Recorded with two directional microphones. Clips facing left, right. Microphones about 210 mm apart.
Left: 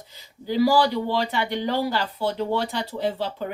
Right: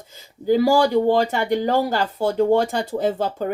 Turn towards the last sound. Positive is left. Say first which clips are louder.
# right 5 dB
turn(degrees=-45)  # may be behind; listen again after turning